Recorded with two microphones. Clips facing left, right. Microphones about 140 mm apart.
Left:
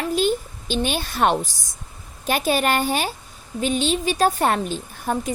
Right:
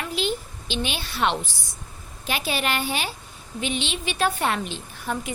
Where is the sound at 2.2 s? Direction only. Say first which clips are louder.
Left 6 dB; 45° left (ahead or behind).